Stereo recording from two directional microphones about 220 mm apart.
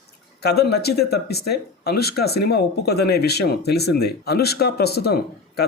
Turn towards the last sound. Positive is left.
turn(degrees=45)  # may be behind; listen again after turning